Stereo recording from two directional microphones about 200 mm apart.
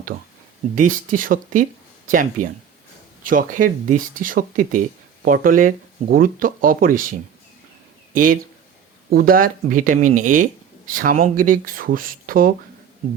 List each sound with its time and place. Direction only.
0.8 s speech: 40° right (ahead or behind)